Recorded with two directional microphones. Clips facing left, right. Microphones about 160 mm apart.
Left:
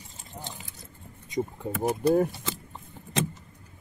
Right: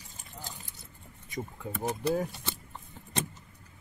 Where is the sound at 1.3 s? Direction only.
25° left (ahead or behind).